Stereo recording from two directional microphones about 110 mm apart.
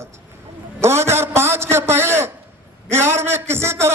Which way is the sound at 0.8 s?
25° right (ahead or behind).